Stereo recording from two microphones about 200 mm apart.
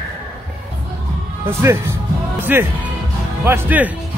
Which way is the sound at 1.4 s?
10° right (ahead or behind).